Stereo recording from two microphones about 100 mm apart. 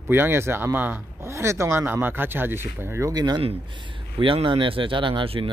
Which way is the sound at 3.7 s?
55° right (ahead or behind).